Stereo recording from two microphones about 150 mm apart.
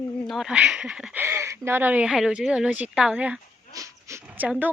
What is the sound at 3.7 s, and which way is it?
Dog, 20° right (ahead or behind).